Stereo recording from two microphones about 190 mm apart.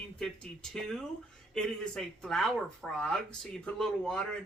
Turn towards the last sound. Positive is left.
turn(degrees=5)  # may be behind; listen again after turning